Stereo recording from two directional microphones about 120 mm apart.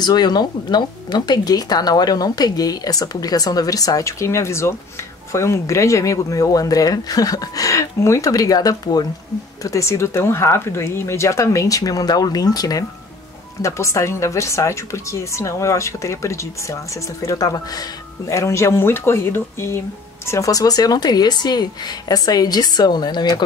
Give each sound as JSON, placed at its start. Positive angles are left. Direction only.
{"t": 0.0, "sound": "speech", "side_deg": 35}